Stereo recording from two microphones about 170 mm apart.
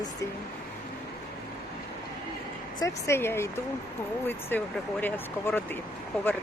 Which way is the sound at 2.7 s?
15° left (ahead or behind).